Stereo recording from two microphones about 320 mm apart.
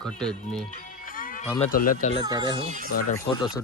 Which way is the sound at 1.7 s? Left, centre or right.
Left.